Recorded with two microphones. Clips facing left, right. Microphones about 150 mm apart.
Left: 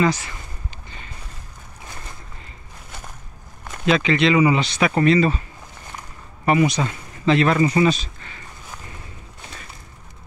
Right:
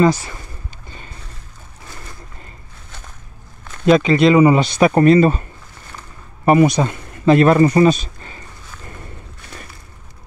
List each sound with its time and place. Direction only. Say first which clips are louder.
3.8 s speech: right 6 dB; 45° right (ahead or behind)